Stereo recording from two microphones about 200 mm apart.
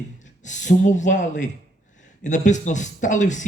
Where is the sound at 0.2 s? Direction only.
40° left (ahead or behind).